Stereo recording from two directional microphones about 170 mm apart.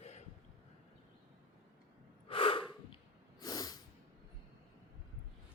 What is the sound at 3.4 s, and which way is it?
Snort, 20° left (ahead or behind).